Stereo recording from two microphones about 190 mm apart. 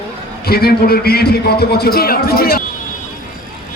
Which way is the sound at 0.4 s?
55° left (ahead or behind).